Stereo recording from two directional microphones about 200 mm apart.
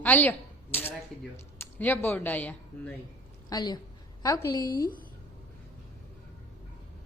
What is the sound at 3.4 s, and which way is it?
A woman's voice, 20° left (ahead or behind).